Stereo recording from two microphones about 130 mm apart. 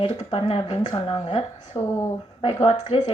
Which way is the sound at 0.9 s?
35° left (ahead or behind).